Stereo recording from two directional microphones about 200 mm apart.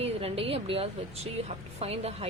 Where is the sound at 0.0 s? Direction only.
30° right (ahead or behind).